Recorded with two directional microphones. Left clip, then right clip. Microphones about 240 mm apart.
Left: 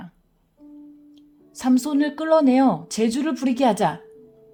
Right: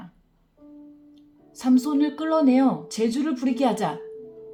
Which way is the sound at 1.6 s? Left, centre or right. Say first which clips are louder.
Left 1 dB; left.